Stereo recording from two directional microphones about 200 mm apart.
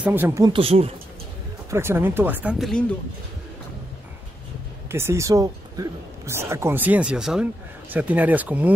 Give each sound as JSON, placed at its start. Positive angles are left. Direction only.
{"t": 0.0, "sound": "speech", "side_deg": -10}
{"t": 0.5, "sound": "speech", "side_deg": -30}
{"t": 1.7, "sound": "speech", "side_deg": -10}
{"t": 4.8, "sound": "speech", "side_deg": -10}